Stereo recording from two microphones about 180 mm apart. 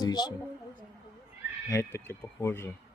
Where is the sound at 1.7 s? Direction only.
15° left (ahead or behind).